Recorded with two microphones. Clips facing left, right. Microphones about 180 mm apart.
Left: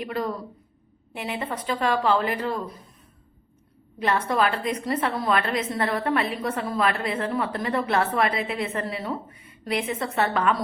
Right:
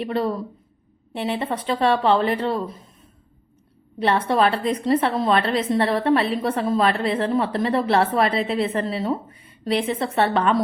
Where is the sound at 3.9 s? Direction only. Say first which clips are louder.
Right 4 dB; 30° right (ahead or behind).